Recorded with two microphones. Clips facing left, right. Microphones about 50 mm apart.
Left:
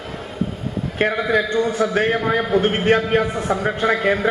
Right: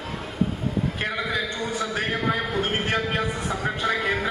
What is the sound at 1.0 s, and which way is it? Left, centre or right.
A man's voice, left.